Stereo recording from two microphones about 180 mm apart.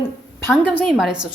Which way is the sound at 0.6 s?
5° left (ahead or behind).